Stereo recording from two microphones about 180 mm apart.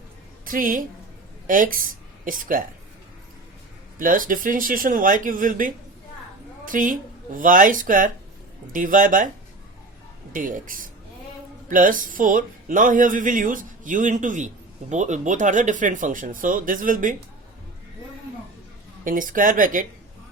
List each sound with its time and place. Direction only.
0.4 s a woman's voice: 50° right (ahead or behind)
3.9 s speech: 50° right (ahead or behind)
10.3 s speech: 50° right (ahead or behind)
19.0 s speech: 50° right (ahead or behind)